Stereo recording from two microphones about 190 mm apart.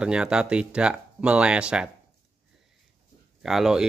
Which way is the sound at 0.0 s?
5° right (ahead or behind).